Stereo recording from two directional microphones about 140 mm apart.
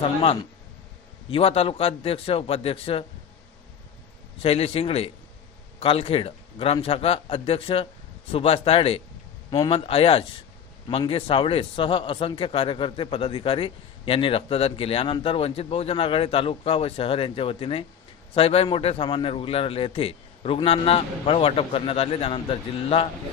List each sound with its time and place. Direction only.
1.3 s speech: 45° left (ahead or behind)
4.4 s a man's voice: 45° left (ahead or behind)